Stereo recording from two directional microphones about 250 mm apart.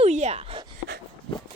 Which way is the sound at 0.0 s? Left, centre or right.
Right.